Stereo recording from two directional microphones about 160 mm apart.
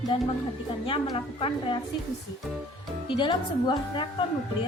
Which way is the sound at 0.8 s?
30° left (ahead or behind).